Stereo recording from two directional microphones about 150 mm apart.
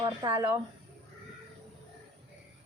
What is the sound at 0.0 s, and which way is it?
Speech, 30° right (ahead or behind).